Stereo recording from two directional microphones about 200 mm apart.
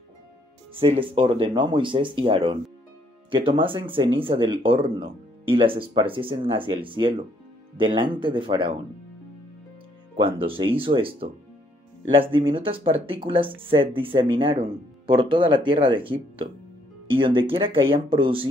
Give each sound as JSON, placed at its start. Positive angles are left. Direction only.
{"t": 0.7, "sound": "speech", "side_deg": -25}
{"t": 10.1, "sound": "speech", "side_deg": -25}